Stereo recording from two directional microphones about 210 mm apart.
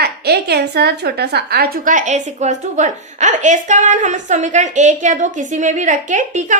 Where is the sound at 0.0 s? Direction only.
50° right (ahead or behind).